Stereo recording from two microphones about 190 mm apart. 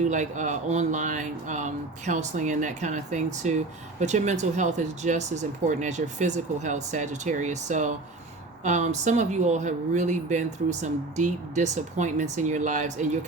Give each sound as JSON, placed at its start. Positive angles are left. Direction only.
{"t": 0.0, "sound": "speech", "side_deg": -40}